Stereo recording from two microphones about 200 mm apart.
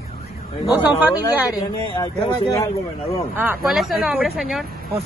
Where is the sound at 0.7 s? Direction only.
10° right (ahead or behind).